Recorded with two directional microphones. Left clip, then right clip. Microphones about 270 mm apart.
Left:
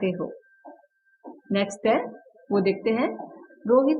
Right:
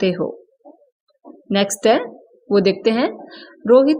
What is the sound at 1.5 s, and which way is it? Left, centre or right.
A woman's voice, right.